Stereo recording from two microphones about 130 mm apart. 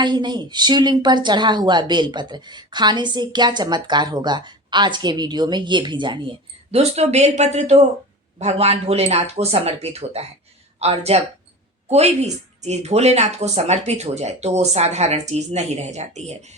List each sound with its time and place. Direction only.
0.0 s a woman's voice: 35° right (ahead or behind)
6.7 s speech: 55° right (ahead or behind)